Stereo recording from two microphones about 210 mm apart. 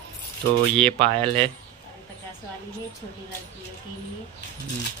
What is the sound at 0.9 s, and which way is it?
Speech, 25° right (ahead or behind).